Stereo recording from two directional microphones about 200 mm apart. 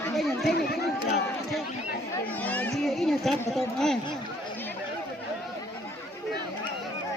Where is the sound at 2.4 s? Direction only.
10° left (ahead or behind).